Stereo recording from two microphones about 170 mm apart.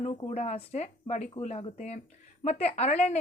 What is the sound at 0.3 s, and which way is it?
A woman's voice, 40° left (ahead or behind).